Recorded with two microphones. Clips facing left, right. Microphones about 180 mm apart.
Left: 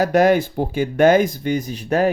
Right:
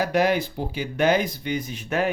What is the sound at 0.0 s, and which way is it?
Speech, 45° left (ahead or behind).